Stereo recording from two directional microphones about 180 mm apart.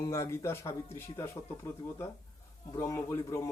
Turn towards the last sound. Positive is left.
turn(degrees=15)  # may be behind; listen again after turning